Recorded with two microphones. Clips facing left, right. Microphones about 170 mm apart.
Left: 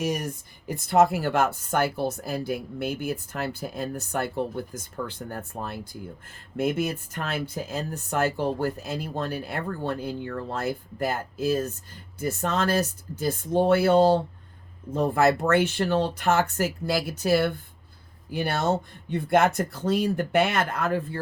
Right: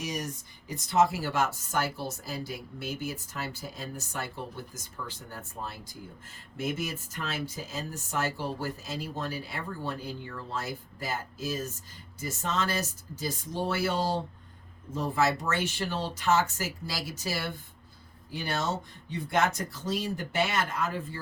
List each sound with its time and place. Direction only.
0.0 s speech: 55° left (ahead or behind)